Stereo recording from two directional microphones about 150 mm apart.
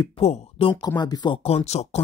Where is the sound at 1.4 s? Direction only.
45° left (ahead or behind).